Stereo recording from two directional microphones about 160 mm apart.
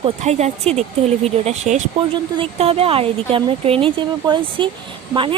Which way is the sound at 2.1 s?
35° right (ahead or behind).